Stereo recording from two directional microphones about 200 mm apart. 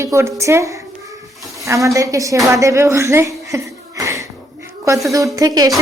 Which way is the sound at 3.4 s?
15° right (ahead or behind).